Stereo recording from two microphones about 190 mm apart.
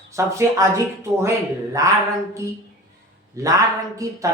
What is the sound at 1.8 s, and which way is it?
Speech, 15° right (ahead or behind).